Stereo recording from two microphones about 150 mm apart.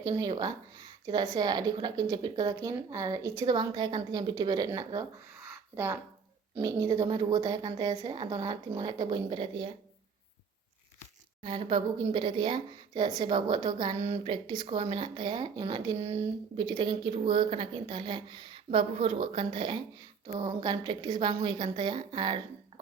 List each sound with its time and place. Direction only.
0.0 s a woman's voice: 25° right (ahead or behind)
5.4 s a sound: 15° right (ahead or behind)
6.6 s a woman's voice: 25° right (ahead or behind)
11.4 s a woman's voice: 35° right (ahead or behind)